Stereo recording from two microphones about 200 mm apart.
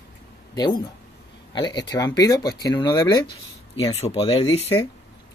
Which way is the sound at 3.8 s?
30° left (ahead or behind).